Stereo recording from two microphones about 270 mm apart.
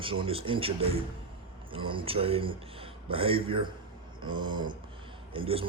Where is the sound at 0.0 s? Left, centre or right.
Centre.